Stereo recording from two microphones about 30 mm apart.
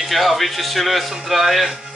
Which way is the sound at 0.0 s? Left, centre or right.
Centre.